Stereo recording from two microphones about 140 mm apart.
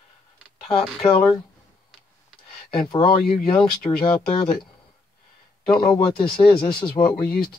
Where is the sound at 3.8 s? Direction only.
40° left (ahead or behind).